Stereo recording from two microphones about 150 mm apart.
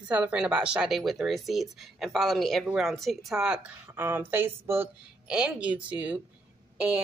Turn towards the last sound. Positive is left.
turn(degrees=-5)  # may be behind; listen again after turning